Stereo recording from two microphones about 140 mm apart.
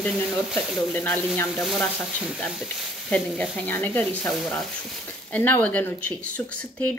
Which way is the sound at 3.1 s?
10° left (ahead or behind).